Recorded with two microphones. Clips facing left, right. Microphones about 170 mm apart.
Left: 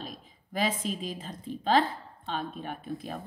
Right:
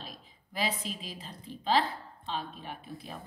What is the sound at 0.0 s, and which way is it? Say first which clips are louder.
A woman's voice: left 5 dB; 45° left (ahead or behind).